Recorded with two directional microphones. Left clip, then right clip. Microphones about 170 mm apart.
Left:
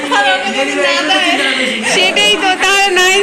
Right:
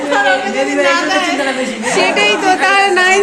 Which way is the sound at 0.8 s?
75° right (ahead or behind).